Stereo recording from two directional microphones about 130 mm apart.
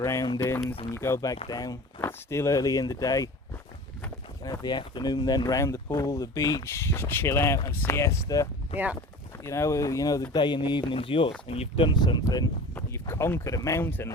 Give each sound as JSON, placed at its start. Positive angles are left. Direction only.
{"t": 0.0, "sound": "speech", "side_deg": 25}
{"t": 4.4, "sound": "speech", "side_deg": 30}
{"t": 11.9, "sound": "speech", "side_deg": 35}
{"t": 12.7, "sound": "speech", "side_deg": 20}